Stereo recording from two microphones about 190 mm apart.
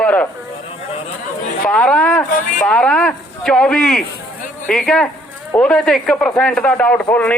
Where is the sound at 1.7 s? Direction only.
5° left (ahead or behind).